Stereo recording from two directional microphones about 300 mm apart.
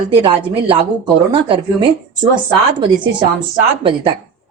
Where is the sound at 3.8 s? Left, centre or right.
Centre.